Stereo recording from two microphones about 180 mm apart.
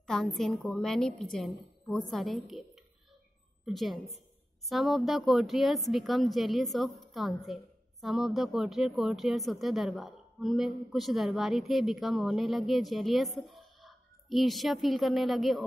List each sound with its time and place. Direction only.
0.0 s speech: centre (ahead or behind)